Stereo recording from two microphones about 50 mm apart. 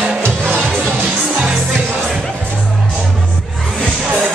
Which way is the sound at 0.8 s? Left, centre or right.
Centre.